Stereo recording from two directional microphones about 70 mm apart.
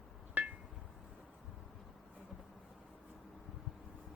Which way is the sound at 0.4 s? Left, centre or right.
Right.